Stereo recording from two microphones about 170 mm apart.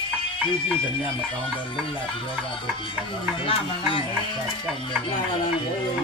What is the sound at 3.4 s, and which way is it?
Speech, 30° left (ahead or behind).